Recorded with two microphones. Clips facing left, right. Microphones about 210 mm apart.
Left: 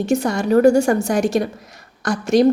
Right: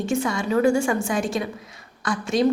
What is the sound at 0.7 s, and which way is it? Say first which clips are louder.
A woman's voice: left 6 dB; 40° left (ahead or behind).